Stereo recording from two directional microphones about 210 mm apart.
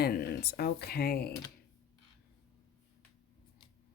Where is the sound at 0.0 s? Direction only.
45° left (ahead or behind).